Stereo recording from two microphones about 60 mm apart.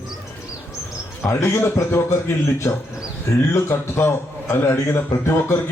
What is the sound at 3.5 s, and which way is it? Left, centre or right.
A man's voice, left.